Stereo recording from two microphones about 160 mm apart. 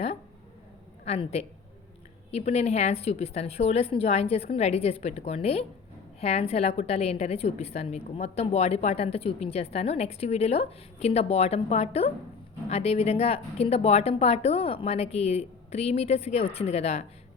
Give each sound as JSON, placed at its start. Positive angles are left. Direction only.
{"t": 1.0, "sound": "a woman's voice", "side_deg": 40}